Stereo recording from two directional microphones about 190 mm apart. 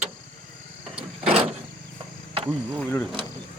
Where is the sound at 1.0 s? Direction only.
30° right (ahead or behind).